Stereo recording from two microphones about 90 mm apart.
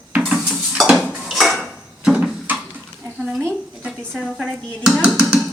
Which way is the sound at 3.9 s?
5° left (ahead or behind).